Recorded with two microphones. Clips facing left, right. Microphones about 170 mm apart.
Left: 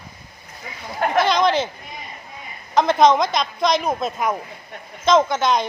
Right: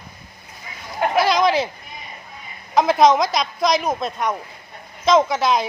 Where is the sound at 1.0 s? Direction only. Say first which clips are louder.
Even; 5° right (ahead or behind).